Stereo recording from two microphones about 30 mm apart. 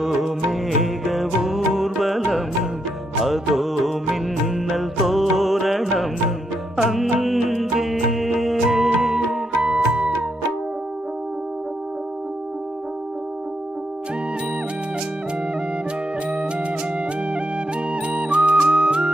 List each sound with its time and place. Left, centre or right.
0.0 s music: centre
3.2 s music: centre
6.9 s music: centre
9.6 s music: right
16.3 s music: right
17.9 s music: right